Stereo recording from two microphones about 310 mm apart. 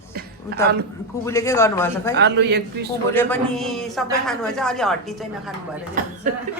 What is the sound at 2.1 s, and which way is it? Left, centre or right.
Speech, right.